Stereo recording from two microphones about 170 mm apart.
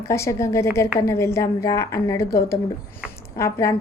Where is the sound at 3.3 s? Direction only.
15° left (ahead or behind).